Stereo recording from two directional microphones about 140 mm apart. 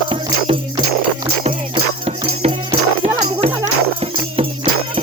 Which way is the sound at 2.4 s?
50° right (ahead or behind).